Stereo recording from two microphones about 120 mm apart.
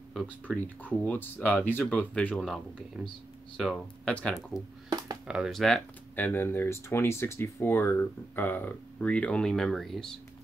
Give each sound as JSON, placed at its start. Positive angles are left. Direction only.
{"t": 0.5, "sound": "speech", "side_deg": 10}
{"t": 4.8, "sound": "a sound", "side_deg": -30}
{"t": 5.2, "sound": "speech", "side_deg": -10}
{"t": 5.5, "sound": "speech", "side_deg": 0}
{"t": 6.1, "sound": "speech", "side_deg": 15}